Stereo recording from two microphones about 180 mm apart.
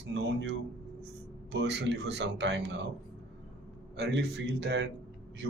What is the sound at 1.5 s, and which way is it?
Speech, 75° right (ahead or behind).